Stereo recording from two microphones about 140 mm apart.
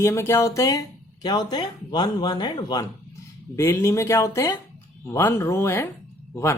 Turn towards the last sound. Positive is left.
turn(degrees=20)  # may be behind; listen again after turning